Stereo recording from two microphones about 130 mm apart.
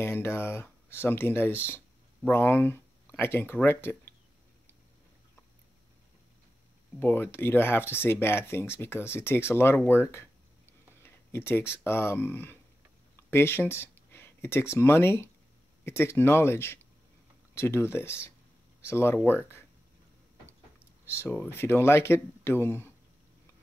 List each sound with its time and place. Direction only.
0.0 s speech: 20° left (ahead or behind)
7.0 s speech: 15° left (ahead or behind)
21.0 s a sound: 20° left (ahead or behind)
21.3 s speech: 15° left (ahead or behind)